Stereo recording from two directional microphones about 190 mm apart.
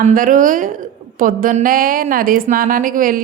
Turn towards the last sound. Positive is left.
turn(degrees=-45)  # may be behind; listen again after turning